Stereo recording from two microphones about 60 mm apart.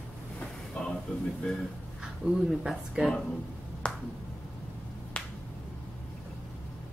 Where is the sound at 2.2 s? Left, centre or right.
Centre.